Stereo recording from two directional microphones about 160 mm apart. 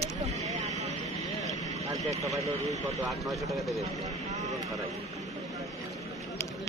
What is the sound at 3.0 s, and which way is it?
Speech, centre (ahead or behind).